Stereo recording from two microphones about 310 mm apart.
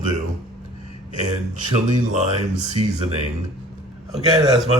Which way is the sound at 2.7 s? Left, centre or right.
Centre.